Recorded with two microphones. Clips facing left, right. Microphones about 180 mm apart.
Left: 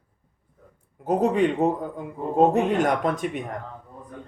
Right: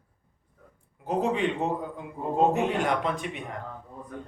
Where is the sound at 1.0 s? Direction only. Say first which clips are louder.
Left 5 dB; 45° left (ahead or behind).